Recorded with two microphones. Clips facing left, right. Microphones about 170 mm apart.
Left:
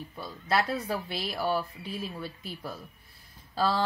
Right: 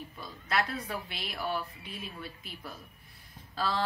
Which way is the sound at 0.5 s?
30° left (ahead or behind).